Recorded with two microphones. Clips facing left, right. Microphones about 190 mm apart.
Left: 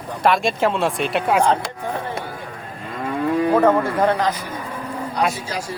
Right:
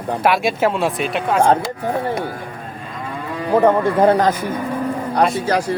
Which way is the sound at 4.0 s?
40° right (ahead or behind).